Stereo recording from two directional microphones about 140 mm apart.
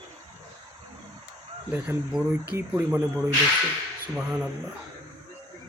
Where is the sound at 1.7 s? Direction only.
10° right (ahead or behind).